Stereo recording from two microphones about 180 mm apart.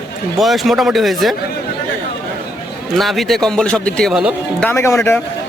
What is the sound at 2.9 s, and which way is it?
Speech, centre (ahead or behind).